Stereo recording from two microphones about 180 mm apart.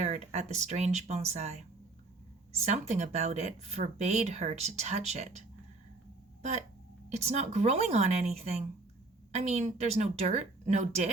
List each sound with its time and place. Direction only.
0.0 s speech: 40° right (ahead or behind)
7.1 s speech: 35° right (ahead or behind)